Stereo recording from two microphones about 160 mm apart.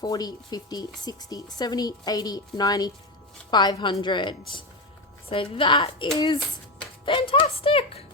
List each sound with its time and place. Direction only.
0.0 s a woman's voice: 25° left (ahead or behind)